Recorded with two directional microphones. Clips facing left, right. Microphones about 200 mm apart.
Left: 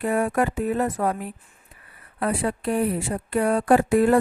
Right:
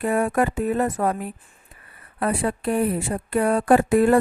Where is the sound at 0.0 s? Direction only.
50° right (ahead or behind).